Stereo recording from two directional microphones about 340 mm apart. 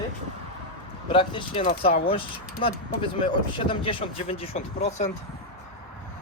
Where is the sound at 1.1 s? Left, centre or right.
Centre.